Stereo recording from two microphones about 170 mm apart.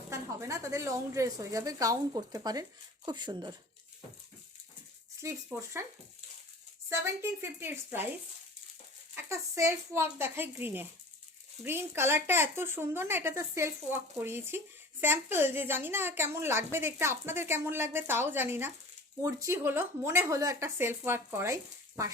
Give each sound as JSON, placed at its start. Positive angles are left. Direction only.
{"t": 0.1, "sound": "a woman's voice", "side_deg": -15}
{"t": 5.2, "sound": "a woman's voice", "side_deg": -15}
{"t": 6.9, "sound": "a woman's voice", "side_deg": -15}